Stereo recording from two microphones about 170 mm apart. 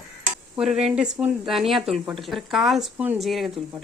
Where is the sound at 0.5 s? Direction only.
Centre (ahead or behind).